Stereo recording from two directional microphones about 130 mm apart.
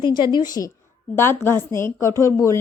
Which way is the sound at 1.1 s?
20° left (ahead or behind).